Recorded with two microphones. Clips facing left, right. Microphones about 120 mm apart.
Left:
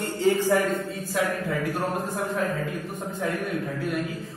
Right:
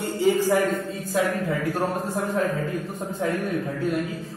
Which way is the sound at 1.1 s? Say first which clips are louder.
Right 3 dB; 30° right (ahead or behind).